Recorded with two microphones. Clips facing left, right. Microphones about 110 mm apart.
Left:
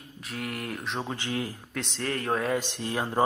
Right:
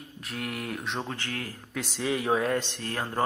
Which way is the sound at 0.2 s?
Centre (ahead or behind).